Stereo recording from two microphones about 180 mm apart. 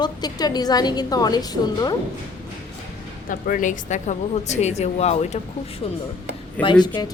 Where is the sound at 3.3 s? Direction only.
45° left (ahead or behind).